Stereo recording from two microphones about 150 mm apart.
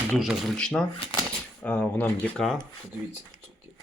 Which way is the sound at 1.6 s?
10° left (ahead or behind).